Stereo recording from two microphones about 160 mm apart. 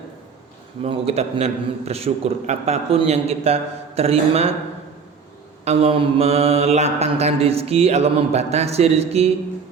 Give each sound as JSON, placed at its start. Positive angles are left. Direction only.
{"t": 0.9, "sound": "mantra", "side_deg": -40}
{"t": 5.6, "sound": "mantra", "side_deg": -40}